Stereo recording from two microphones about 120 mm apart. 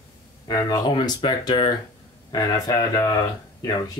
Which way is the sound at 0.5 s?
35° left (ahead or behind).